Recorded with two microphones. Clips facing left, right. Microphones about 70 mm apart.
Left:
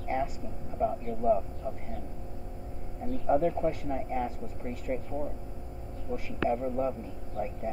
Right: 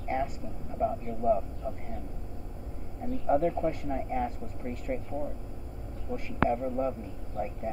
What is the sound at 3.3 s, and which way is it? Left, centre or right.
Speech, centre.